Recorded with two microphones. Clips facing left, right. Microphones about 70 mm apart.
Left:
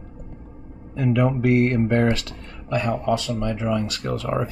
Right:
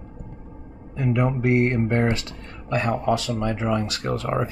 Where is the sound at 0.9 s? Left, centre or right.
Right.